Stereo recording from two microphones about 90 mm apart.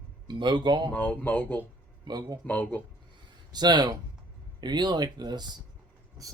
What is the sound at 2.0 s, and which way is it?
Speech, 50° right (ahead or behind).